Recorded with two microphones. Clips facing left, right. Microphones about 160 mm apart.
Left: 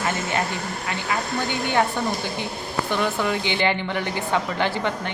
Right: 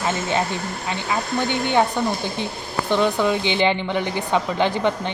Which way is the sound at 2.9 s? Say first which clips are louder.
Right 5 dB; 20° right (ahead or behind).